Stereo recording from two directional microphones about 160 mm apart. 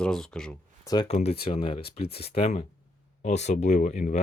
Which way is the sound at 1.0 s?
40° left (ahead or behind).